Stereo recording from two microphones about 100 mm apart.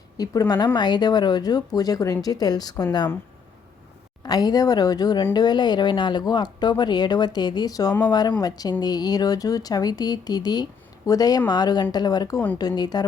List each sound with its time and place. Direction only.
0.2 s speech: 40° left (ahead or behind)
4.2 s speech: 40° left (ahead or behind)